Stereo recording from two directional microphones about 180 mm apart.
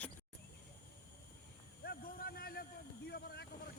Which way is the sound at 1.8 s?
60° left (ahead or behind).